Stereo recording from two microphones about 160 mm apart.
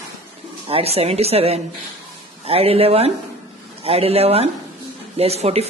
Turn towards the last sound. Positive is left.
turn(degrees=-40)  # may be behind; listen again after turning